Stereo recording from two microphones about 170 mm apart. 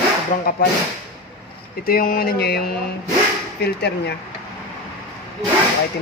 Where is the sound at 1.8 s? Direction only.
60° left (ahead or behind); by 4.1 s 75° left (ahead or behind).